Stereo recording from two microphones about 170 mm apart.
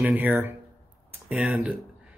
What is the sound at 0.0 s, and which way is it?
Speech, 10° right (ahead or behind).